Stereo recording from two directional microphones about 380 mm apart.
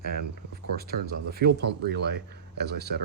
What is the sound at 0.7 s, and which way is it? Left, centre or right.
Speech, right.